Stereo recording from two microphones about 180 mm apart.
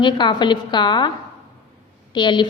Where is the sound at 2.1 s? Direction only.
25° left (ahead or behind).